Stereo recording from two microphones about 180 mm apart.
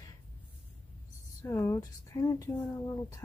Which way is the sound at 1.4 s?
15° left (ahead or behind).